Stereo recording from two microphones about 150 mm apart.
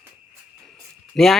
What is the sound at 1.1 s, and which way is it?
Speech, centre (ahead or behind).